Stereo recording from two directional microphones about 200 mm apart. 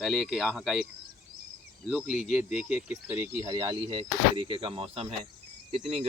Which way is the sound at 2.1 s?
Centre (ahead or behind).